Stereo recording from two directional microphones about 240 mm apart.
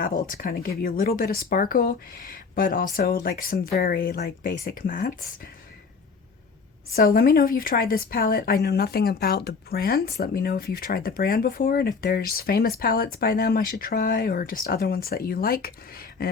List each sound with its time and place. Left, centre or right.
0.0 s a woman's voice: left
6.9 s a woman's voice: left